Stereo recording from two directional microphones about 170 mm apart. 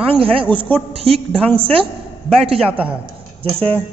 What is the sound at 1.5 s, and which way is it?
A woman's voice, 30° right (ahead or behind).